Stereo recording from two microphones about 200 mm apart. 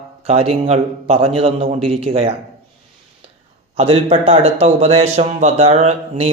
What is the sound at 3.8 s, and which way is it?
A man's voice, 30° right (ahead or behind).